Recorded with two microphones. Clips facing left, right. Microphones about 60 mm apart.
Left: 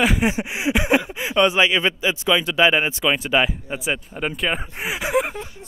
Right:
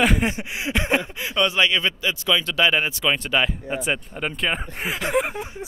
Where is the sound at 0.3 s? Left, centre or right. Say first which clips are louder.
Left 4 dB; centre.